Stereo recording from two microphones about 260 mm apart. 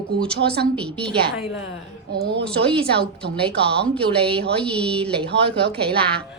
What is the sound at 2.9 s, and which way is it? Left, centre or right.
Speech, right.